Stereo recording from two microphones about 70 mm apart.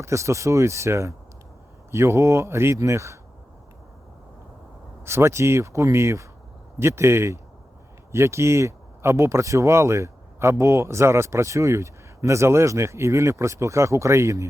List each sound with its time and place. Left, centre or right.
0.0 s speech: right
5.0 s speech: right